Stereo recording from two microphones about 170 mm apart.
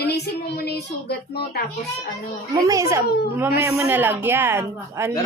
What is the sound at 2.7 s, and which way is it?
Speech, 15° right (ahead or behind).